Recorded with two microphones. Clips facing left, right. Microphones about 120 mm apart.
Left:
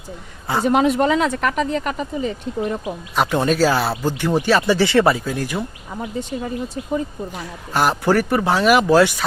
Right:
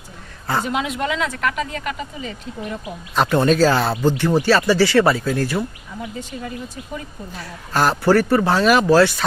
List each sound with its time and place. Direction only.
0.6 s speech: 40° left (ahead or behind)
3.2 s speech: 10° left (ahead or behind)
6.0 s speech: 30° left (ahead or behind)
7.3 s speech: 15° left (ahead or behind)